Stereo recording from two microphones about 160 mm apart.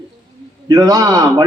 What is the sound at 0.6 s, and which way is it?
Speech, 25° right (ahead or behind).